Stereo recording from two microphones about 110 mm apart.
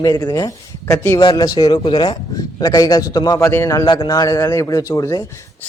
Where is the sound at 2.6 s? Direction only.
35° left (ahead or behind).